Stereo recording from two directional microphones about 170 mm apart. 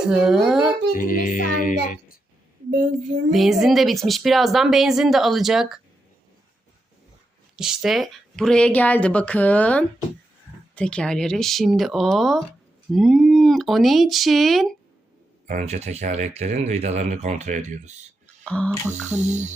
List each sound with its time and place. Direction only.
0.1 s speech: 5° right (ahead or behind)
0.9 s music: 55° left (ahead or behind)
3.3 s speech: centre (ahead or behind)
7.5 s speech: 5° right (ahead or behind)
15.4 s speech: 45° right (ahead or behind)
18.4 s a sound: 5° left (ahead or behind)
18.9 s music: 10° right (ahead or behind)
19.3 s music: 45° right (ahead or behind)